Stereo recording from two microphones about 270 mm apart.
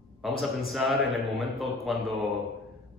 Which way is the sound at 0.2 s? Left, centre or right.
Centre.